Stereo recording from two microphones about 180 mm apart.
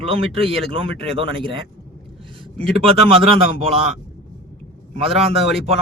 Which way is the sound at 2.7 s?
35° right (ahead or behind).